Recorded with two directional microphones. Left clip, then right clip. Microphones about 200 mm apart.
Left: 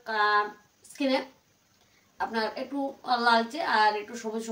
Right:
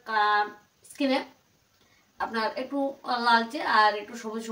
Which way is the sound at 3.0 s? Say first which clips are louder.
Even; 20° left (ahead or behind).